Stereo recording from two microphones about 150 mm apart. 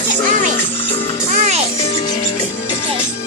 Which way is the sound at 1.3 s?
50° right (ahead or behind).